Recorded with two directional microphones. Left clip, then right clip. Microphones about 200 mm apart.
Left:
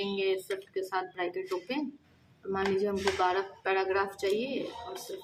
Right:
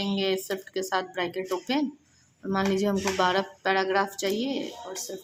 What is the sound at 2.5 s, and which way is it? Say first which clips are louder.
A woman's voice: right 3 dB; 50° right (ahead or behind).